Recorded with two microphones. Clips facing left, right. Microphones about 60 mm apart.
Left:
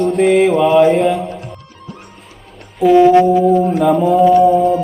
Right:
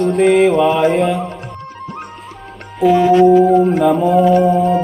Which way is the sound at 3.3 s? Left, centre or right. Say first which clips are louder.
Right 2 dB; right.